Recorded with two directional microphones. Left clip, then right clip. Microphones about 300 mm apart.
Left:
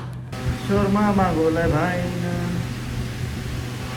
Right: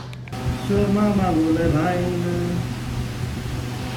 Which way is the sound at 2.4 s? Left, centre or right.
Centre.